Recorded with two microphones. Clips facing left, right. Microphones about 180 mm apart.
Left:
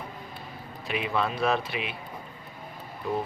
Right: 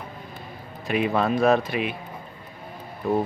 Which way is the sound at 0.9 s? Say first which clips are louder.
Right 6 dB; 45° right (ahead or behind).